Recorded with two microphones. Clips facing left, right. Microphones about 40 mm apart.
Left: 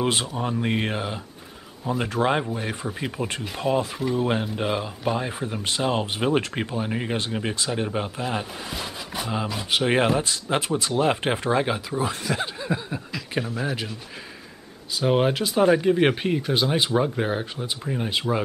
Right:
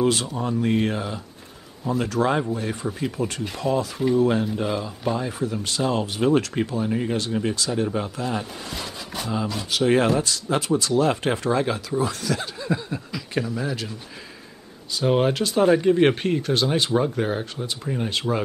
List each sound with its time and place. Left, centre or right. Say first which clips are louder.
0.0 s speech: right 2 dB; left
8.7 s a sound: left 1 dB; centre
9.7 s speech: right 2 dB; left
15.0 s speech: right 1 dB; centre